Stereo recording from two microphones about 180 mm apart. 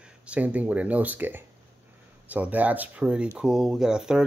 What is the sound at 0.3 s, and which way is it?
Speech, 10° right (ahead or behind).